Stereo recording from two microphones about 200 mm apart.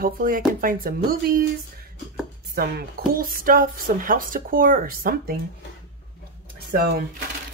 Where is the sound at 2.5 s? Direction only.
50° right (ahead or behind).